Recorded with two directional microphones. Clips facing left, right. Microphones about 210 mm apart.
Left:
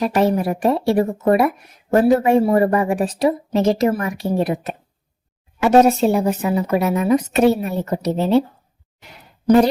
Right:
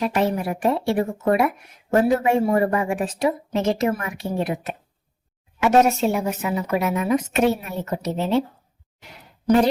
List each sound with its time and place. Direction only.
0.0 s speech: 40° left (ahead or behind)